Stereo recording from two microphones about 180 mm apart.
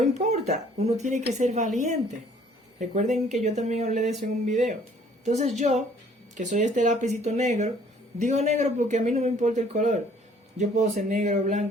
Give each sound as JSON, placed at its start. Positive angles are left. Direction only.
{"t": 0.0, "sound": "speech", "side_deg": -40}
{"t": 2.7, "sound": "speech", "side_deg": -40}